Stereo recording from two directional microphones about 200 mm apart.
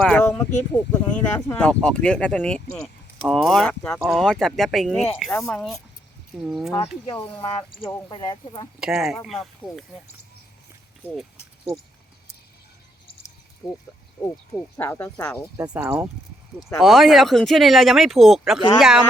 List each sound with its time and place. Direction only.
0.0 s speech: 5° left (ahead or behind)
8.1 s speech: 20° left (ahead or behind)
8.8 s speech: 5° right (ahead or behind)
13.6 s speech: centre (ahead or behind)
14.8 s speech: 10° left (ahead or behind)
15.5 s speech: 10° right (ahead or behind)